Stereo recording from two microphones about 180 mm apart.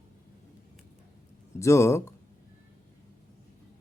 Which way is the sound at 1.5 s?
15° left (ahead or behind).